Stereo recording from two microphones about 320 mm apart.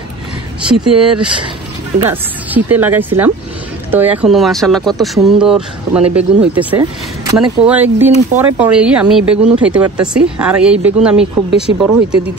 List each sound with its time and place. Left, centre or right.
0.7 s speech: centre